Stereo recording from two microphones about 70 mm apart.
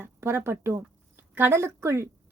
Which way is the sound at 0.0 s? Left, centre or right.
Right.